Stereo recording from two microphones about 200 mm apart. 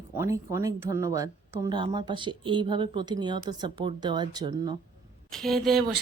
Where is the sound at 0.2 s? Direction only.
15° right (ahead or behind).